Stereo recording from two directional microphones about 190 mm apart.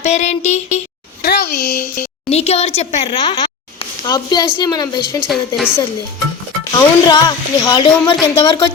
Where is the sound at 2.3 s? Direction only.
35° left (ahead or behind).